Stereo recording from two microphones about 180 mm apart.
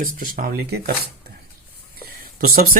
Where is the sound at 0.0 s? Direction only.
50° right (ahead or behind).